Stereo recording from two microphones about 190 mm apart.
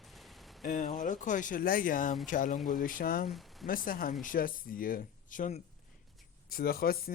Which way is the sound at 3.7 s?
50° left (ahead or behind).